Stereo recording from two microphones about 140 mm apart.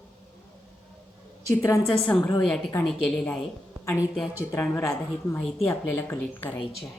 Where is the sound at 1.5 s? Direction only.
20° left (ahead or behind); by 2.7 s 5° left (ahead or behind).